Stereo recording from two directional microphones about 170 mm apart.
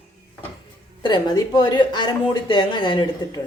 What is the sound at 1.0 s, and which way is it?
Speech, 25° left (ahead or behind).